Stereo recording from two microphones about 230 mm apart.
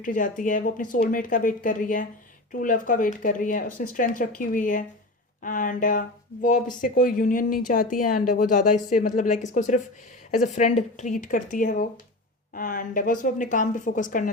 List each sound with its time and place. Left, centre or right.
0.0 s speech: left